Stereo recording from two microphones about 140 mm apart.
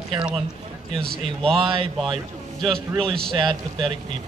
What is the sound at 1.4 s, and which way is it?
Speech, 5° left (ahead or behind).